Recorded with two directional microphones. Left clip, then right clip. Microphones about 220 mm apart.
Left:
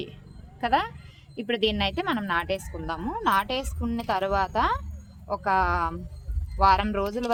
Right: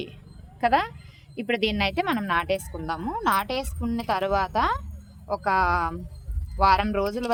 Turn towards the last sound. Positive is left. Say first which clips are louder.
# right 1 dB
turn(degrees=-20)  # may be behind; listen again after turning